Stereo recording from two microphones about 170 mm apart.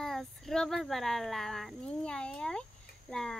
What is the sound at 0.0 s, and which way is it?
A child's voice, centre (ahead or behind).